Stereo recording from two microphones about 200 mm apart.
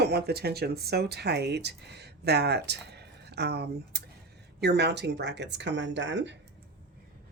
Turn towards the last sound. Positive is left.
turn(degrees=-60)  # may be behind; listen again after turning